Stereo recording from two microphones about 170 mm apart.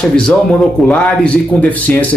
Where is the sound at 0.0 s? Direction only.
5° left (ahead or behind).